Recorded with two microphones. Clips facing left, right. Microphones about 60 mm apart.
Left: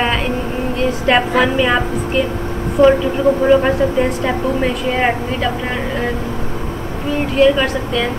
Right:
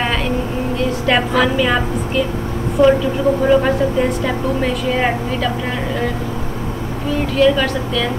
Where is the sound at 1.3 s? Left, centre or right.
Centre.